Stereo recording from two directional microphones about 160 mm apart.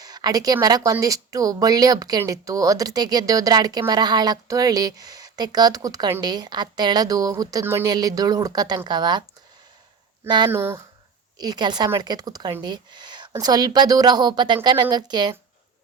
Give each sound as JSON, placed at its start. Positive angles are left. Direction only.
{"t": 0.0, "sound": "a woman's voice", "side_deg": -25}
{"t": 10.2, "sound": "speech", "side_deg": -30}
{"t": 10.5, "sound": "speech", "side_deg": -15}
{"t": 11.3, "sound": "speech", "side_deg": -25}